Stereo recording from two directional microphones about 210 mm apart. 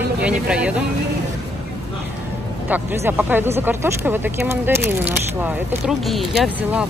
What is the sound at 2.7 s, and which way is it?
Speech, 10° right (ahead or behind).